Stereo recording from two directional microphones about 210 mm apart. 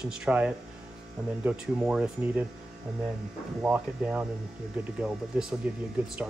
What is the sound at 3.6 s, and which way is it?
Speech, 5° right (ahead or behind).